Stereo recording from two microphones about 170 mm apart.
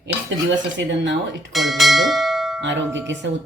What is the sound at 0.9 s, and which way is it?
Speech, 90° right.